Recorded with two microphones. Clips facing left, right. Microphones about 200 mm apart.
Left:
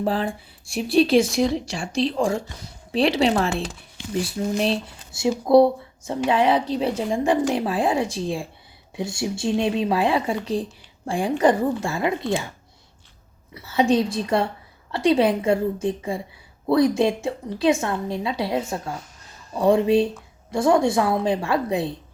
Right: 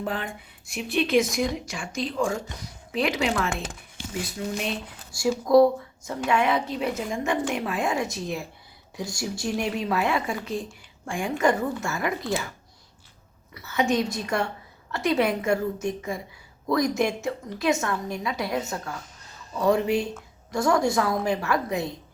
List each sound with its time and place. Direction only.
0.0 s speech: 35° left (ahead or behind)